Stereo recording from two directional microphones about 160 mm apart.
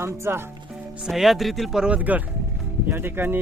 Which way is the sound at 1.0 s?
Centre (ahead or behind).